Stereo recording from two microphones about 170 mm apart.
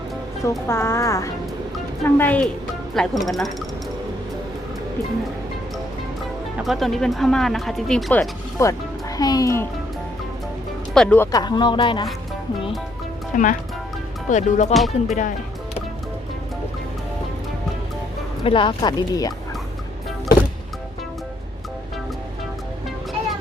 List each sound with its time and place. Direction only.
0.7 s a woman's voice: 15° left (ahead or behind)
6.6 s speech: centre (ahead or behind)
8.6 s a woman's voice: 20° left (ahead or behind)
10.9 s a woman's voice: 5° left (ahead or behind)
11.3 s speech: 25° left (ahead or behind)
13.3 s speech: 50° left (ahead or behind)
14.7 s speech: centre (ahead or behind)
18.4 s speech: 30° left (ahead or behind)